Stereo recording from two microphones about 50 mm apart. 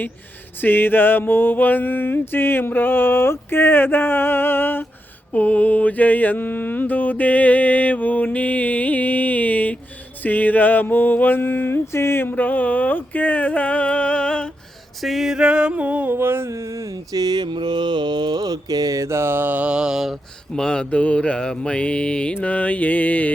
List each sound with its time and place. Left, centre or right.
0.6 s mantra: left
5.3 s mantra: left
11.9 s a sound: left
12.3 s a sound: left; by 14.5 s centre
15.0 s male singing: centre
15.4 s music: centre
16.0 s mantra: right
16.5 s speech: right
18.9 s mantra: right
19.6 s mantra: centre
20.5 s mantra: centre